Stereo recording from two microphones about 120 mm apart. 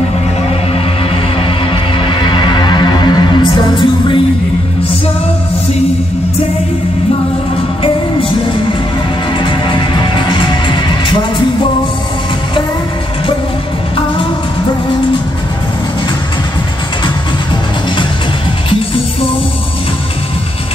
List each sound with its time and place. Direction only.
1.4 s music: 45° left (ahead or behind)
9.4 s music: 45° left (ahead or behind)